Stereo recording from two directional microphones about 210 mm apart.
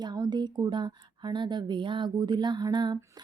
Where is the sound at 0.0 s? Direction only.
20° right (ahead or behind).